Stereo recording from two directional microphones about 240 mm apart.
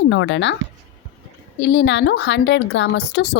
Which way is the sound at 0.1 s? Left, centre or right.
Left.